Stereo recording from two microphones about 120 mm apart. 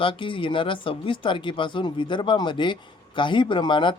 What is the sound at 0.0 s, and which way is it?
Speech, 45° left (ahead or behind).